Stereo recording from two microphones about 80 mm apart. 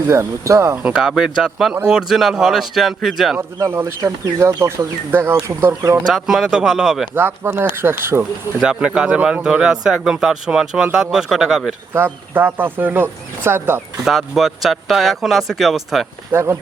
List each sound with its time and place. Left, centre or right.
0.1 s speech: right
0.8 s speech: centre
3.6 s speech: right
6.1 s speech: centre
7.2 s speech: right
8.2 s speech: centre
11.9 s speech: right
14.0 s speech: centre
16.3 s speech: right